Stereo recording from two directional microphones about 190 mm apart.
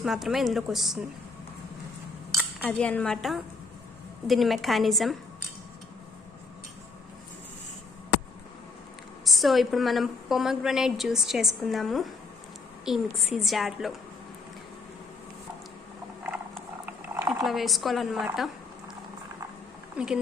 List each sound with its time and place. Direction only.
0.0 s a woman's voice: centre (ahead or behind)
2.3 s cutlery: centre (ahead or behind)
4.3 s a woman's voice: centre (ahead or behind)
9.2 s a woman's voice: centre (ahead or behind)
16.8 s a sound: 15° right (ahead or behind)
17.4 s a woman's voice: centre (ahead or behind)
20.0 s speech: 5° right (ahead or behind)